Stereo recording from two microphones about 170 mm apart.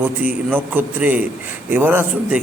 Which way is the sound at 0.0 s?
10° right (ahead or behind).